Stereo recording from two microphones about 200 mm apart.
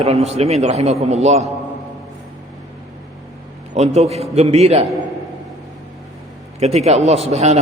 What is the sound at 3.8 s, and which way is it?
A man's voice, 30° right (ahead or behind).